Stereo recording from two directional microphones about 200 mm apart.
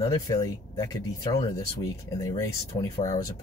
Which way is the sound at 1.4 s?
15° left (ahead or behind).